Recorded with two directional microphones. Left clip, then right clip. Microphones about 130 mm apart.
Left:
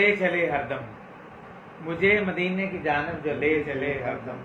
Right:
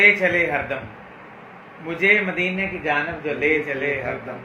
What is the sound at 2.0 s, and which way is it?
A man's voice, 15° right (ahead or behind).